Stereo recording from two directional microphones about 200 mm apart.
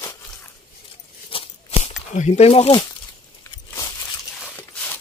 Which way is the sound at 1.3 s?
30° left (ahead or behind).